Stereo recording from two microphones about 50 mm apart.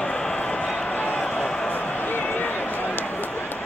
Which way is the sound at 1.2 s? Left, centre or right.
Centre.